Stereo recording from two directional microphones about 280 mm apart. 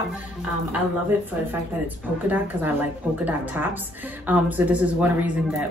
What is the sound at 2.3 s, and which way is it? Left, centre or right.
A woman's voice, centre.